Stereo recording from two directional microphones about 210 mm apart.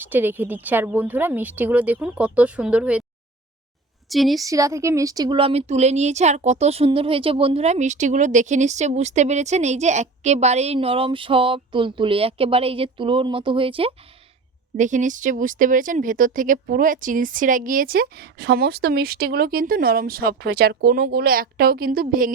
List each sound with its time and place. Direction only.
0.0 s a woman's voice: 10° right (ahead or behind)
4.1 s a woman's voice: centre (ahead or behind)
4.4 s a woman's voice: 15° right (ahead or behind)
14.8 s speech: 35° right (ahead or behind)